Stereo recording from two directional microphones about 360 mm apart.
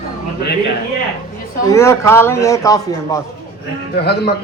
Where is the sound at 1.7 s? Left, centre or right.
Centre.